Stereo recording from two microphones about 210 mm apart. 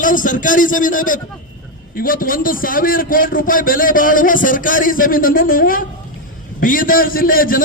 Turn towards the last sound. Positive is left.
turn(degrees=40)  # may be behind; listen again after turning